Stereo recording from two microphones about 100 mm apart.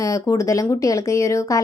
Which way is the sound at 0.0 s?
30° left (ahead or behind).